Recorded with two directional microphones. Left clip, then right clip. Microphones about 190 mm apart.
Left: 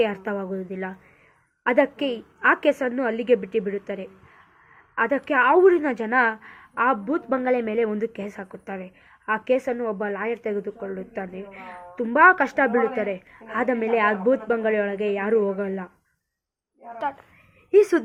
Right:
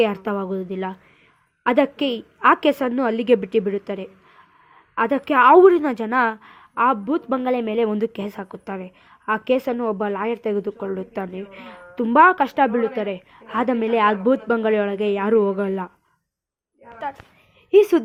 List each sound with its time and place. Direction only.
0.0 s a woman's voice: 50° right (ahead or behind)